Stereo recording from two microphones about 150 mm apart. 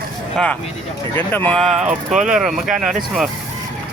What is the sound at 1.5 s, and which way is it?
Speech, centre (ahead or behind).